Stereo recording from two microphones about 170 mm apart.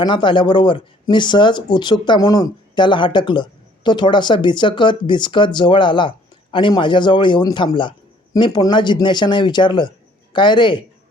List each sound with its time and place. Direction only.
0.0 s speech: 25° left (ahead or behind)